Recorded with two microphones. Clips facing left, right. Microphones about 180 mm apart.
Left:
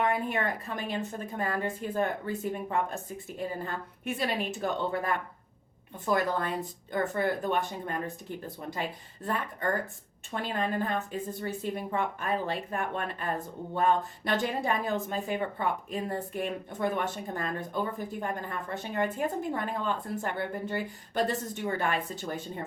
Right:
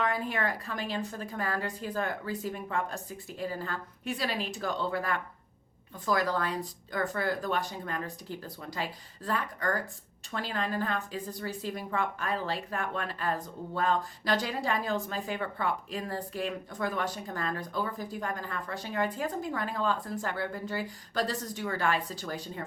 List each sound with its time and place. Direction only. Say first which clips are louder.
0.0 s a woman's voice: left 2 dB; 20° left (ahead or behind)